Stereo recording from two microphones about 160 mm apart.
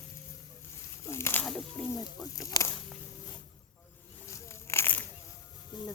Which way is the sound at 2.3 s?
20° left (ahead or behind).